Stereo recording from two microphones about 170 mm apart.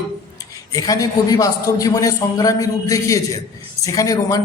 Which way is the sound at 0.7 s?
20° left (ahead or behind).